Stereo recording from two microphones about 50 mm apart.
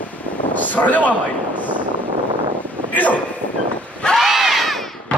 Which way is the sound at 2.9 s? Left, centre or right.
Left.